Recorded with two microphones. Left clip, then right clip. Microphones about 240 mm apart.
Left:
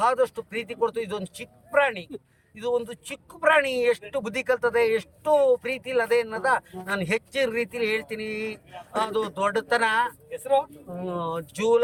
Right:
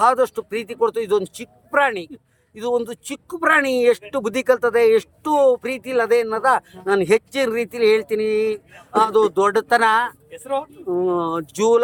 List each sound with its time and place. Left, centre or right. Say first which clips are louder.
0.0 s speech: right 6 dB; centre